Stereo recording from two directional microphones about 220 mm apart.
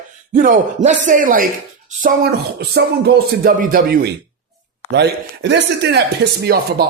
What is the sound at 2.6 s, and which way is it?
Speech, 45° right (ahead or behind).